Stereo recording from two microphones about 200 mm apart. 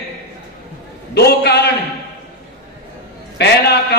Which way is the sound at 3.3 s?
55° left (ahead or behind).